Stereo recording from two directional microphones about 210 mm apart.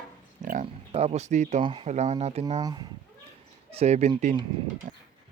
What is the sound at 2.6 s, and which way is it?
Speech, 20° right (ahead or behind).